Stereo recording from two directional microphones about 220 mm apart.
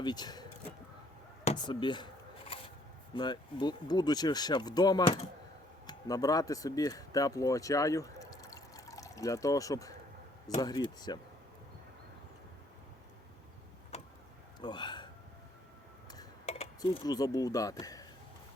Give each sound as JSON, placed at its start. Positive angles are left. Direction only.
{"t": 0.0, "sound": "speech", "side_deg": 20}
{"t": 1.5, "sound": "speech", "side_deg": 20}
{"t": 3.2, "sound": "speech", "side_deg": 20}
{"t": 13.9, "sound": "vehicle", "side_deg": 30}
{"t": 14.6, "sound": "a sound", "side_deg": 20}
{"t": 16.8, "sound": "speech", "side_deg": 20}